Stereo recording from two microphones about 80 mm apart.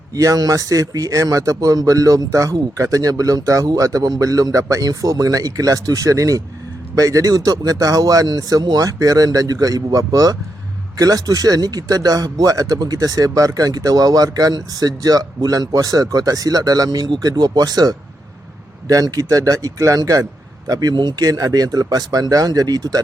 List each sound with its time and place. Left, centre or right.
0.1 s speech: right
17.1 s speech: right